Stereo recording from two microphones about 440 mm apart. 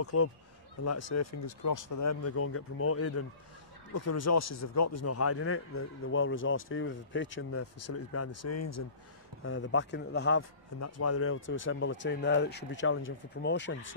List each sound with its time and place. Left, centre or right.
0.0 s speech: left
9.4 s speech: left